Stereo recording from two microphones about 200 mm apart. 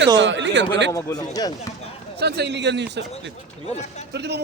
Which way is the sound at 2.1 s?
55° right (ahead or behind).